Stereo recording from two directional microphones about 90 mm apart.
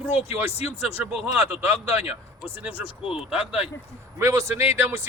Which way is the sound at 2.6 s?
15° right (ahead or behind).